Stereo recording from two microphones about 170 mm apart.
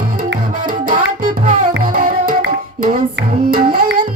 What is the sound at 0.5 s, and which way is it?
Music, 50° right (ahead or behind).